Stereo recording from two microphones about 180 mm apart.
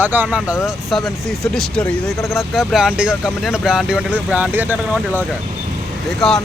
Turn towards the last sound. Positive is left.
turn(degrees=0)  # may be behind; listen again after turning